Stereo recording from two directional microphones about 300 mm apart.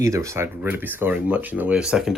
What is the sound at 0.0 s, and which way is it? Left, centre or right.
Speech, centre.